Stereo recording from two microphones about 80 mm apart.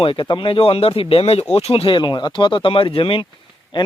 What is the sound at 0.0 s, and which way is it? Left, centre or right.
Speech, left.